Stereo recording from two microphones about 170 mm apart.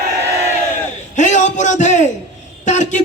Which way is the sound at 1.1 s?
45° left (ahead or behind).